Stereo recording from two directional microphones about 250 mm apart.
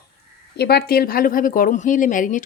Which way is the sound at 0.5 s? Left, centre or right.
Left.